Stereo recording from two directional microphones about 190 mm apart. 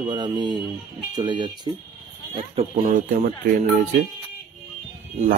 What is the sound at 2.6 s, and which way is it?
Speech, 45° right (ahead or behind).